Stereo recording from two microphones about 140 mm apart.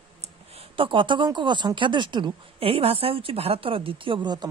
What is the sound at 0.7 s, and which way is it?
Speech, 35° right (ahead or behind).